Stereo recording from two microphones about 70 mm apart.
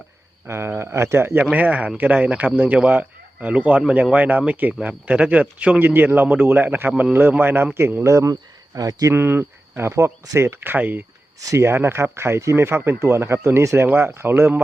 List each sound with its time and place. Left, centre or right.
0.4 s speech: right
1.5 s a man's voice: centre; by 9.1 s right
9.1 s cricket: right
10.3 s speech: right